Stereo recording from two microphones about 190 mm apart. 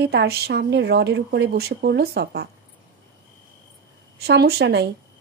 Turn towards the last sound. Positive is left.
turn(degrees=-60)  # may be behind; listen again after turning